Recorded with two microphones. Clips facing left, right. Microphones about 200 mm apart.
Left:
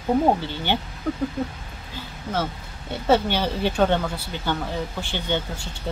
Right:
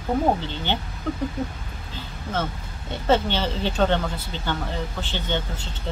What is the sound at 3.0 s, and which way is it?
Speech, 10° left (ahead or behind).